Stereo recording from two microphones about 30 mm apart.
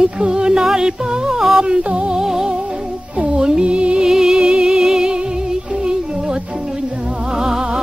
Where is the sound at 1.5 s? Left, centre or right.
Right.